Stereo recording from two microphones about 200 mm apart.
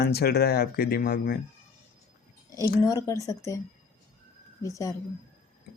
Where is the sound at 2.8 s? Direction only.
15° left (ahead or behind).